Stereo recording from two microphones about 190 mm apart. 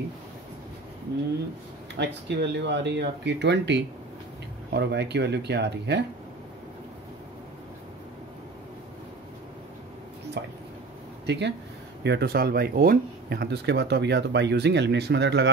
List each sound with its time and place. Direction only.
2.0 s speech: 65° right (ahead or behind)
10.4 s a sound: 60° right (ahead or behind)
11.2 s speech: 65° right (ahead or behind)